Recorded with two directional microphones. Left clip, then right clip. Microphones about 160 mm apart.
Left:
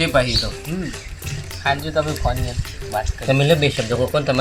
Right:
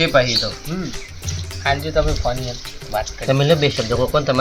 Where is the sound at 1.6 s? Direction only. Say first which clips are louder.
Right 1 dB; 20° right (ahead or behind).